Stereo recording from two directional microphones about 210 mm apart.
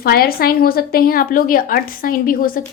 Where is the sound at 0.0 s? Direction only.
45° left (ahead or behind).